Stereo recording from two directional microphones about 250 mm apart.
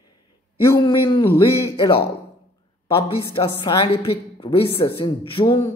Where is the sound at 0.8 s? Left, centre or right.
Centre.